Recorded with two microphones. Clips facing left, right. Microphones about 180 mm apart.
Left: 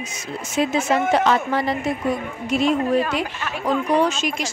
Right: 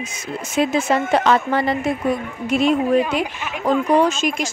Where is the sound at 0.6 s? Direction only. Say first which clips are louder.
Right 1 dB; 65° right (ahead or behind).